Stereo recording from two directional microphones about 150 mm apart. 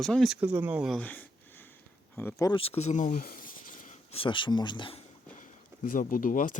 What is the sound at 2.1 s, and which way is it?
Speech, 15° left (ahead or behind).